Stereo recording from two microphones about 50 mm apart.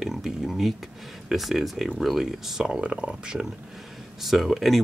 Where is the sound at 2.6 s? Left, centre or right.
Right.